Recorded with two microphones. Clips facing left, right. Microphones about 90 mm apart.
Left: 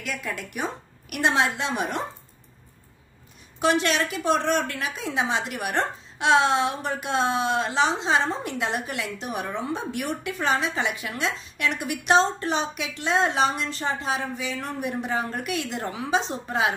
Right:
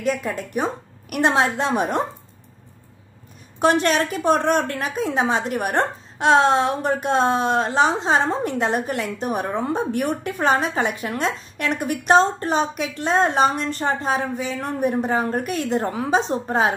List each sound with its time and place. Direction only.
0.0 s a woman's voice: 40° right (ahead or behind)
3.5 s a woman's voice: 45° right (ahead or behind)